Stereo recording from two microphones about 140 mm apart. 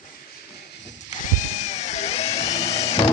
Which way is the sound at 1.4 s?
55° left (ahead or behind).